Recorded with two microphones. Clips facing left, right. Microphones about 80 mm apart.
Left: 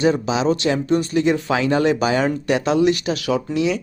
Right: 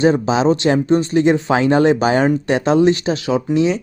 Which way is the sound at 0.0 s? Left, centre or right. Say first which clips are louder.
Right 4 dB; right.